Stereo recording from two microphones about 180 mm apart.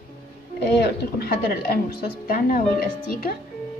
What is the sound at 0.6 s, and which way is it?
A woman's voice, 65° left (ahead or behind).